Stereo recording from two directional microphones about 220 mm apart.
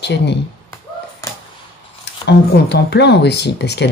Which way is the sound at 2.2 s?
50° left (ahead or behind).